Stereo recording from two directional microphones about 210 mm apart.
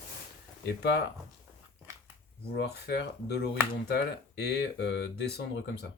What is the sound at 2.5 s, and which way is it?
Speech, 50° left (ahead or behind).